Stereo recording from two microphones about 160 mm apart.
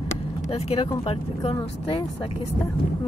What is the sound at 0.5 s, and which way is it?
Speech, 35° left (ahead or behind).